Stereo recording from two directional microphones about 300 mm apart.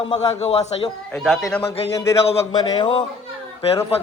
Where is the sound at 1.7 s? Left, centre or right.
Centre.